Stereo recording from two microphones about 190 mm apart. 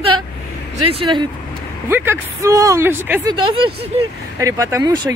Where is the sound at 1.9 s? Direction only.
10° right (ahead or behind).